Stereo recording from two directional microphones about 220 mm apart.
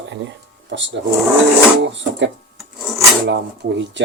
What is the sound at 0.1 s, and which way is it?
Speech, 55° right (ahead or behind).